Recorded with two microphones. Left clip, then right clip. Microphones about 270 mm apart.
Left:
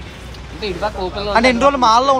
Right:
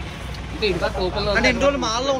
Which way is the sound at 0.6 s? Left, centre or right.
Centre.